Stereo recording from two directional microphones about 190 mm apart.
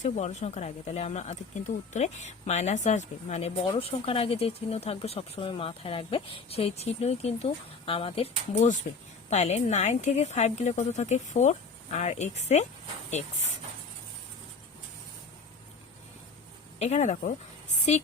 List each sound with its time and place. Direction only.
0.0 s speech: 40° left (ahead or behind)
16.7 s speech: 35° left (ahead or behind)